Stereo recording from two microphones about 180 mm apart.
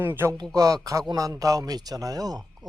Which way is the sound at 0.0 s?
10° right (ahead or behind).